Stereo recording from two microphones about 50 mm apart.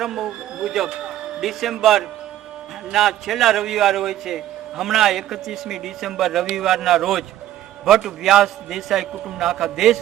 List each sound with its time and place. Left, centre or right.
0.0 s a man's voice: centre
0.9 s a sound: centre
1.4 s a man's voice: centre